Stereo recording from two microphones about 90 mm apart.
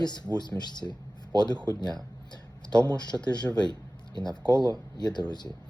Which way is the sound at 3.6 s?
55° left (ahead or behind).